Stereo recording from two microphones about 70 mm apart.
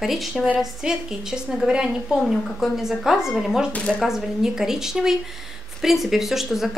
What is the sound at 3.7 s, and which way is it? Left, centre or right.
Speech, centre.